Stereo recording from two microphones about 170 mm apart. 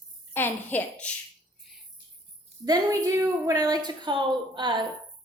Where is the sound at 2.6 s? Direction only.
20° right (ahead or behind).